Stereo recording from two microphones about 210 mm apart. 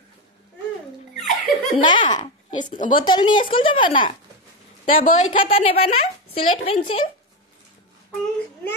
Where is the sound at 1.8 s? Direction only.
20° left (ahead or behind).